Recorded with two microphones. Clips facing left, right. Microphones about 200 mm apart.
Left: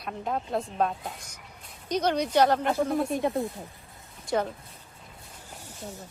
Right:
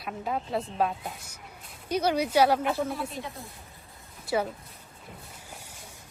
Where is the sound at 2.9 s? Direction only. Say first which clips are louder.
Left 9 dB; 50° left (ahead or behind).